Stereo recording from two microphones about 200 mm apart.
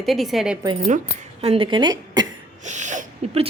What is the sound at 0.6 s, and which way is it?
A woman's voice, 20° right (ahead or behind).